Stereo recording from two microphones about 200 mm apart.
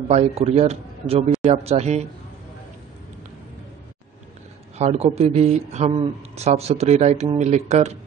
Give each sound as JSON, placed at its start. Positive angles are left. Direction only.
{"t": 0.1, "sound": "a man's voice", "side_deg": -30}
{"t": 4.7, "sound": "a man's voice", "side_deg": -30}